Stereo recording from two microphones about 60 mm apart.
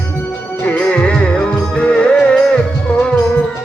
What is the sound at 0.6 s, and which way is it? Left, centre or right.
Music, left.